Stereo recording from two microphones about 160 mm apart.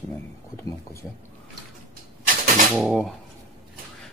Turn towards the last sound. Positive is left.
turn(degrees=0)  # may be behind; listen again after turning